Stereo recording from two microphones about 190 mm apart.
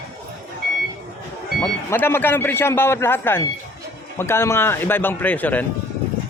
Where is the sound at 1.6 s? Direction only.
10° left (ahead or behind).